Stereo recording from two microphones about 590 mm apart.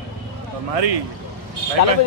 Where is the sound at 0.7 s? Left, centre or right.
Right.